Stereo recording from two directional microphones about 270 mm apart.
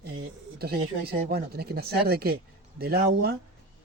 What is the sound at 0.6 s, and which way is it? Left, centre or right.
Speech, right.